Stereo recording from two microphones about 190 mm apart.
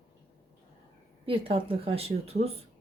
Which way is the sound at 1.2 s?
30° right (ahead or behind).